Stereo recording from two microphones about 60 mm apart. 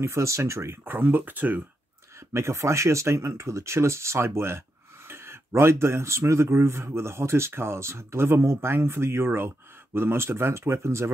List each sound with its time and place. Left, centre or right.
0.0 s speech: right
0.9 s speech: right
2.1 s speech: right